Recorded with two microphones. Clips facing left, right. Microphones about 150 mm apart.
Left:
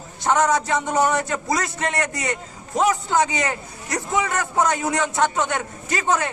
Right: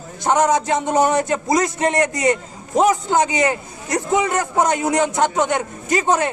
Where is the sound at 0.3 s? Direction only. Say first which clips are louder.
Right 3 dB; 20° right (ahead or behind).